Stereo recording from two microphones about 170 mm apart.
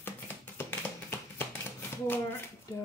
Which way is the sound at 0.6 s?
10° left (ahead or behind).